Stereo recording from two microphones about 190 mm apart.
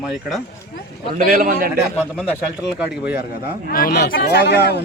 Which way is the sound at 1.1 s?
45° right (ahead or behind).